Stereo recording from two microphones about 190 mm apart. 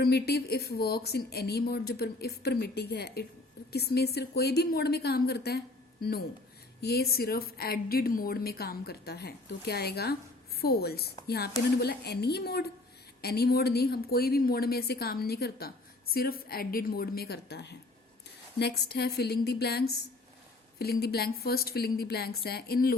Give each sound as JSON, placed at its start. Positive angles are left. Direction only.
{"t": 0.0, "sound": "a woman's voice", "side_deg": 55}
{"t": 6.8, "sound": "a woman's voice", "side_deg": 55}